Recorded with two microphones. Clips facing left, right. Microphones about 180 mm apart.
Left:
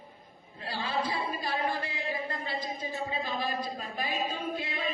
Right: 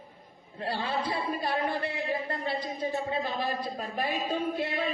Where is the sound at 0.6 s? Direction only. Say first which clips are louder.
Right 2 dB; 60° right (ahead or behind).